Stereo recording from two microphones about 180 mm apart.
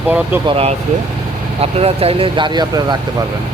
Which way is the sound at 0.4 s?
30° right (ahead or behind).